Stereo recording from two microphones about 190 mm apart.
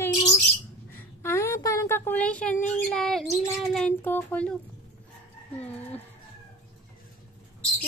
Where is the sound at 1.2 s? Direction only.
15° left (ahead or behind).